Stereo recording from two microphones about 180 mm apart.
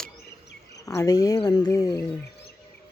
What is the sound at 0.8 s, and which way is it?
Speech, 20° left (ahead or behind).